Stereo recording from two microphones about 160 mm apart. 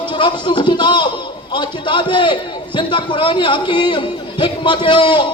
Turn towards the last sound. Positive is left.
turn(degrees=30)  # may be behind; listen again after turning